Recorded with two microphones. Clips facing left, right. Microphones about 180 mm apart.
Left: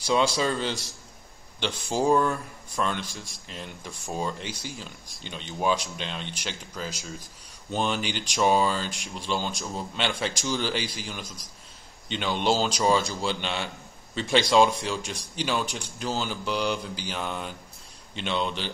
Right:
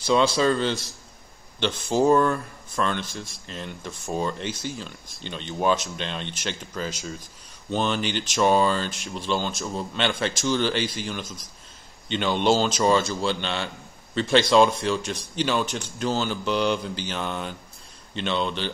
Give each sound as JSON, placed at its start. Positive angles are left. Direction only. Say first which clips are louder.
{"t": 0.0, "sound": "speech", "louder": "right 4 dB", "side_deg": 15}
{"t": 2.0, "sound": "speech", "louder": "right 4 dB", "side_deg": 10}